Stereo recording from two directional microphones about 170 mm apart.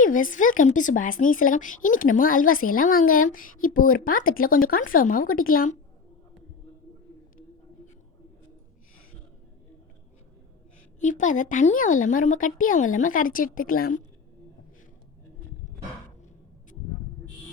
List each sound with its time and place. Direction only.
0.0 s a woman's voice: 50° left (ahead or behind)
11.0 s a woman's voice: 50° left (ahead or behind)